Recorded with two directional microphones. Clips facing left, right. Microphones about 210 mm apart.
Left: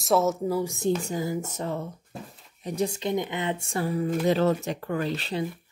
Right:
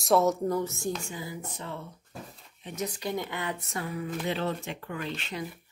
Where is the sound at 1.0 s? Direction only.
45° left (ahead or behind).